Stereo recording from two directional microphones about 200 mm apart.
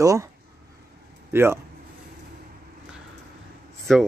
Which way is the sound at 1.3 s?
10° right (ahead or behind).